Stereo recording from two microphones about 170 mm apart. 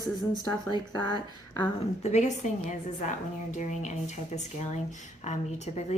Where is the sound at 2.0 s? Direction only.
40° left (ahead or behind).